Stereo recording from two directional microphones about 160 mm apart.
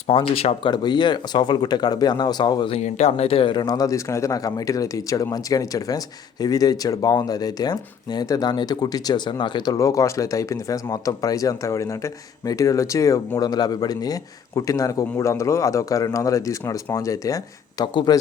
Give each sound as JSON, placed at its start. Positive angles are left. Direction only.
{"t": 0.1, "sound": "speech", "side_deg": 35}